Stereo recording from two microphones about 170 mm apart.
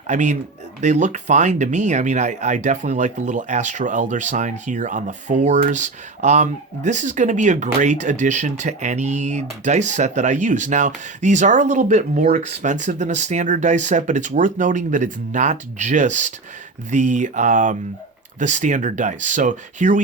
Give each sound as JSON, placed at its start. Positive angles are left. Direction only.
{"t": 0.1, "sound": "speech", "side_deg": -45}